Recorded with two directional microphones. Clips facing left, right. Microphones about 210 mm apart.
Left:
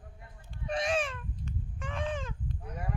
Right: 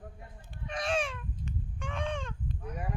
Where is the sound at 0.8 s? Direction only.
Centre (ahead or behind).